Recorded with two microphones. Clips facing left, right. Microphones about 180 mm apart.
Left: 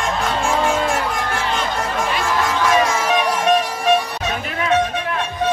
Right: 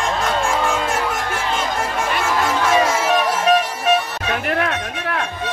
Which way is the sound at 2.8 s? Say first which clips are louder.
Right 1 dB; 5° right (ahead or behind).